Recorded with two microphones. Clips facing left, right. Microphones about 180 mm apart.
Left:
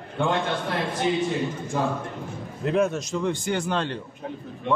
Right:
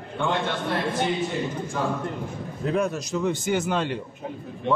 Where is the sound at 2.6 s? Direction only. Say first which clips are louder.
Left 2 dB; centre (ahead or behind).